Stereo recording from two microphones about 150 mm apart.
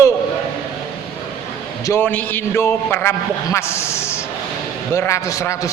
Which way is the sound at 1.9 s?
10° left (ahead or behind).